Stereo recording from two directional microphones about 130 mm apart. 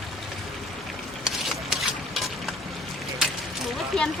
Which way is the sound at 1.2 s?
Centre (ahead or behind).